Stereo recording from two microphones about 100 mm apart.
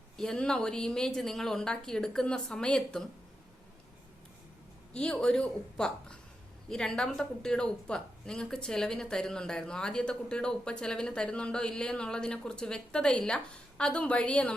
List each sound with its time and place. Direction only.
0.2 s speech: 5° left (ahead or behind)
4.9 s speech: 10° left (ahead or behind)